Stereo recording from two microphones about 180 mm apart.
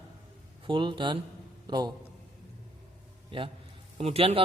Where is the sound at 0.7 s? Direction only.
25° right (ahead or behind).